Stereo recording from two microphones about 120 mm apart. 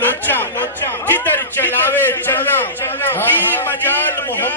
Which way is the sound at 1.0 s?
15° left (ahead or behind).